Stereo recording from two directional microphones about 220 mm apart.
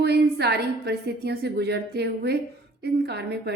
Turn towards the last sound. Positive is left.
turn(degrees=-50)  # may be behind; listen again after turning